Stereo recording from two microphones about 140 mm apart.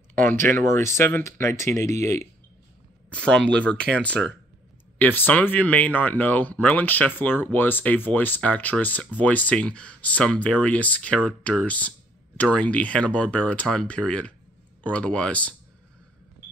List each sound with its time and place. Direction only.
0.1 s speech: 15° left (ahead or behind)
3.1 s speech: 5° left (ahead or behind)